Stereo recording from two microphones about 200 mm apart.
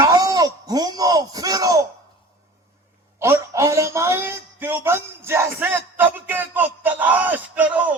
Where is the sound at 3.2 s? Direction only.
15° right (ahead or behind).